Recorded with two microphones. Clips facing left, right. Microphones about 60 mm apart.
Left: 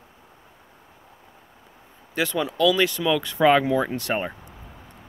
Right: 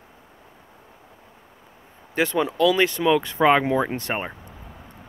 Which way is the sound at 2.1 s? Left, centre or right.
Right.